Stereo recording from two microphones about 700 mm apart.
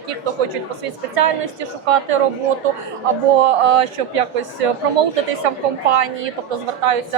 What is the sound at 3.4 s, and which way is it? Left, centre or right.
A woman's voice, right.